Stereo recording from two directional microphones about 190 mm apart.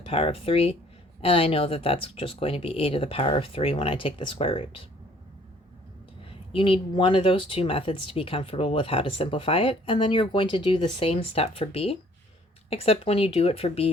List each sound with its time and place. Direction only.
0.0 s speech: 30° left (ahead or behind)
6.5 s speech: 25° left (ahead or behind)